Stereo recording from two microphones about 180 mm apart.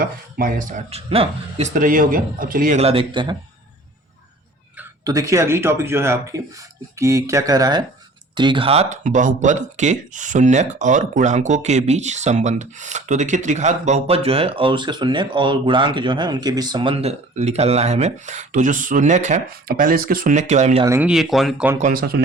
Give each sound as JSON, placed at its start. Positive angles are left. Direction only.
{"t": 0.0, "sound": "speech", "side_deg": -50}
{"t": 1.7, "sound": "speech", "side_deg": -50}
{"t": 2.8, "sound": "speech", "side_deg": -30}
{"t": 5.0, "sound": "a man's voice", "side_deg": -20}
{"t": 20.8, "sound": "a man's voice", "side_deg": -15}
{"t": 21.1, "sound": "speech", "side_deg": 0}
{"t": 21.8, "sound": "speech", "side_deg": -50}